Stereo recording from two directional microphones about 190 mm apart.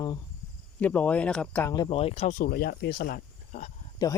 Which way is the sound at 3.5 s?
35° left (ahead or behind).